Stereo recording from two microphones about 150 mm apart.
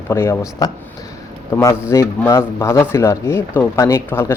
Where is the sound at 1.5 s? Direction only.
15° left (ahead or behind).